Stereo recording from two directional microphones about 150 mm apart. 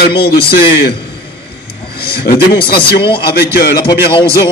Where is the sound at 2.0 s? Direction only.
90° left.